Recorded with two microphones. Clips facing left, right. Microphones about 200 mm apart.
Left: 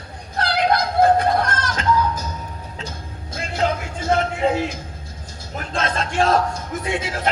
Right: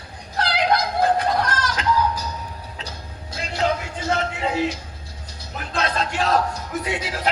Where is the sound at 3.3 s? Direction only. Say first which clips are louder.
Left 1 dB; 50° left (ahead or behind).